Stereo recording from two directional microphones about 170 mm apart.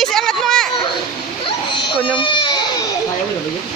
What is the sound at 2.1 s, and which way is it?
Speech, 30° left (ahead or behind).